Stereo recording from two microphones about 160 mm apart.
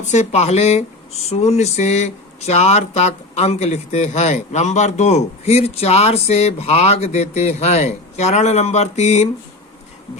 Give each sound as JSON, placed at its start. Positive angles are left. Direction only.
{"t": 0.0, "sound": "speech", "side_deg": 50}